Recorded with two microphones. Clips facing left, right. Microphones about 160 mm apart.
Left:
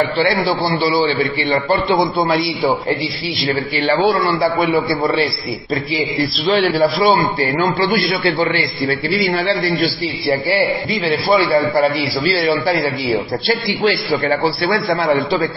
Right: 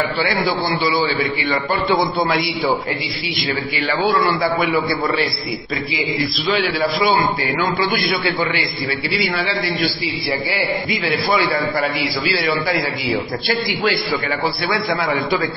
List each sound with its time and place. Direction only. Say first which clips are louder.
1.9 s a man's voice: right 1 dB; 30° left (ahead or behind)
4.4 s a man's voice: left 3 dB; 30° left (ahead or behind)
6.5 s a man's voice: left 6 dB; 40° left (ahead or behind)
11.8 s a man's voice: left 5 dB; 35° left (ahead or behind)
13.8 s a man's voice: left 6 dB; 35° left (ahead or behind)